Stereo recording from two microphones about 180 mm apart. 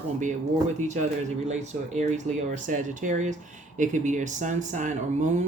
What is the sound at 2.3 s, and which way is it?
Speech, 40° right (ahead or behind).